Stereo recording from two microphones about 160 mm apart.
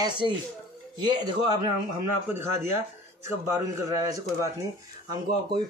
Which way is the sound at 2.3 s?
15° right (ahead or behind).